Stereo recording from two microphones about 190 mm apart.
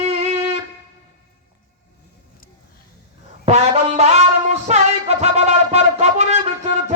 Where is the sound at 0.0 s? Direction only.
30° right (ahead or behind).